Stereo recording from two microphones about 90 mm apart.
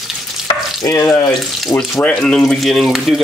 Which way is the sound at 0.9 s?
25° left (ahead or behind).